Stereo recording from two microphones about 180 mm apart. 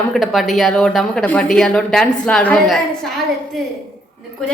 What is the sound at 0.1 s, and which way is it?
Speech, centre (ahead or behind).